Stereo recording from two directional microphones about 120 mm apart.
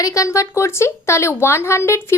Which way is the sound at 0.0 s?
25° left (ahead or behind).